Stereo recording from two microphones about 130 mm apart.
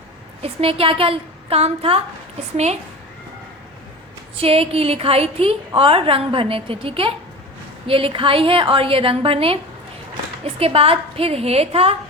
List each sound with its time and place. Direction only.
0.4 s a woman's voice: 45° right (ahead or behind)
4.4 s a woman's voice: 50° right (ahead or behind)